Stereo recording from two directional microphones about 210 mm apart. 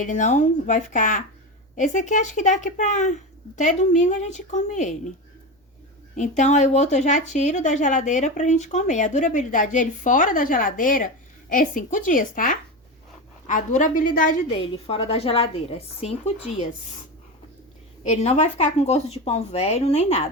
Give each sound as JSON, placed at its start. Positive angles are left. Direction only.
{"t": 0.0, "sound": "a woman's voice", "side_deg": 35}
{"t": 6.1, "sound": "a woman's voice", "side_deg": 35}
{"t": 14.6, "sound": "a woman's voice", "side_deg": 30}
{"t": 18.0, "sound": "a woman's voice", "side_deg": 35}